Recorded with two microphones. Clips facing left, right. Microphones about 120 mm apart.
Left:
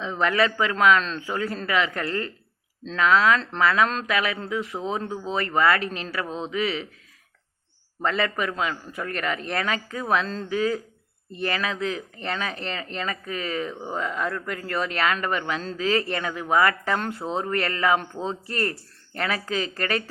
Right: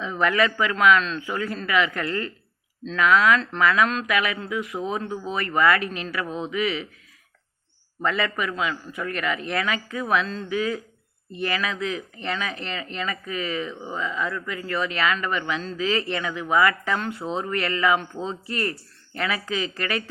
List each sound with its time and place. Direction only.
0.0 s speech: 30° left (ahead or behind)
8.0 s speech: 40° left (ahead or behind)